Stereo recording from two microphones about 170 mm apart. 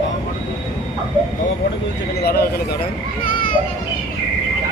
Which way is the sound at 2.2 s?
65° left (ahead or behind).